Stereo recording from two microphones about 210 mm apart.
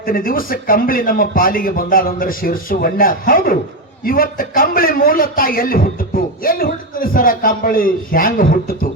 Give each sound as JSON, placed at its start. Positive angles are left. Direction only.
{"t": 0.0, "sound": "a man's voice", "side_deg": 45}